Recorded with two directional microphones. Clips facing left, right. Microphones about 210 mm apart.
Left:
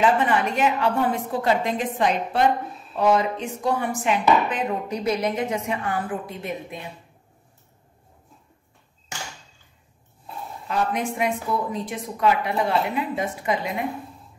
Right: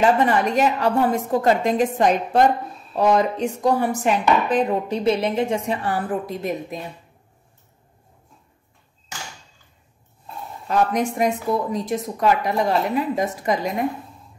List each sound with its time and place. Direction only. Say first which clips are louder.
0.0 s chopping: right 3 dB; 40° right (ahead or behind)
10.7 s chopping: right 4 dB; 40° right (ahead or behind)